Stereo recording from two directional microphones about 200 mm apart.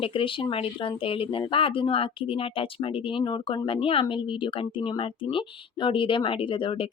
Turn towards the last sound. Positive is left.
turn(degrees=25)  # may be behind; listen again after turning